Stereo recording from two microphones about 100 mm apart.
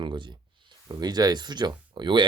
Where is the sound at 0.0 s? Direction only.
50° right (ahead or behind).